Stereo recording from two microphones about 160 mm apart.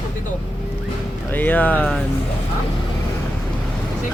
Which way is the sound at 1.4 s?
10° left (ahead or behind).